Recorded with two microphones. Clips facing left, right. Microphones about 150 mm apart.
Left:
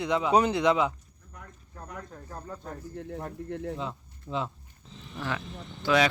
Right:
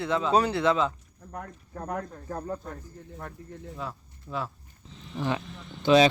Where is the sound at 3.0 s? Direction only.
70° left (ahead or behind).